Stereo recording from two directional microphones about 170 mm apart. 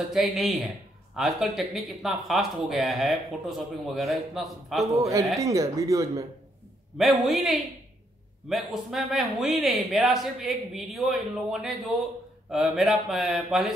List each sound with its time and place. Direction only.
0.1 s a man's voice: centre (ahead or behind)
4.9 s speech: 20° right (ahead or behind)
7.2 s a man's voice: centre (ahead or behind)